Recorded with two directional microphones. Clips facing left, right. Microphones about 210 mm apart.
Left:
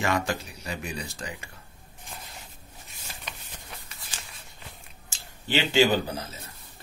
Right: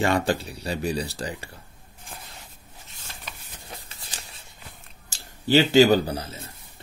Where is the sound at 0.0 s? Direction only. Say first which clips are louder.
Right 5 dB; 30° right (ahead or behind).